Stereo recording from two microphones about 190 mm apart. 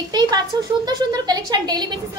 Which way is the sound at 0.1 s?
20° right (ahead or behind).